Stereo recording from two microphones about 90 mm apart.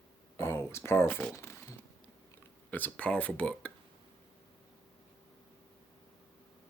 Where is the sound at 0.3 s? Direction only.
25° left (ahead or behind).